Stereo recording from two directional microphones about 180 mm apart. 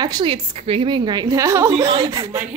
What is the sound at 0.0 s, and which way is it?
A woman's voice, 25° right (ahead or behind).